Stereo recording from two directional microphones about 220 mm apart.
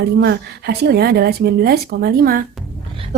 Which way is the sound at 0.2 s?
45° right (ahead or behind).